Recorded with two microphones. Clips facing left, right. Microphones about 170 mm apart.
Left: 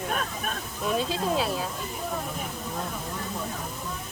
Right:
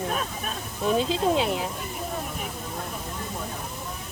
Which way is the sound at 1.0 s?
25° right (ahead or behind).